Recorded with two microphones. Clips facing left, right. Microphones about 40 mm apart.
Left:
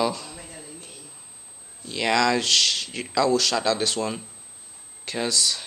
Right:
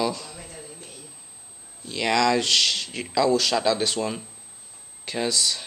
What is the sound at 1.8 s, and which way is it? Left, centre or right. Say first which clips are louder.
Speech: even; centre.